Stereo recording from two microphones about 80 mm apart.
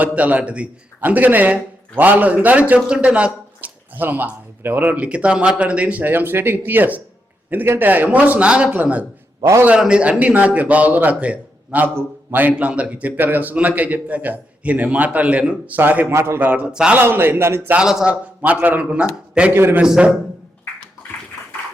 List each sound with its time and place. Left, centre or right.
0.0 s a man's voice: centre
9.4 s a man's voice: right
9.6 s a man's voice: centre; by 16.5 s right
16.5 s a man's voice: centre
16.9 s a man's voice: right
17.6 s a man's voice: right
19.5 s a man's voice: right
19.8 s a man's voice: centre